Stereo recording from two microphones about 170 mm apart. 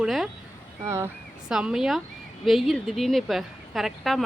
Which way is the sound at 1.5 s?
5° right (ahead or behind).